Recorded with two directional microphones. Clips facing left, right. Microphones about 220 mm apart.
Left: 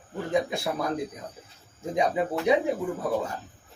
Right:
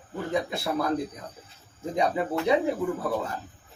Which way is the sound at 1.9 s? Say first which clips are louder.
Even; 15° left (ahead or behind).